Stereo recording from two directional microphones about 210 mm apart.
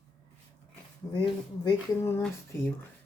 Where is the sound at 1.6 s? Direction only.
15° left (ahead or behind).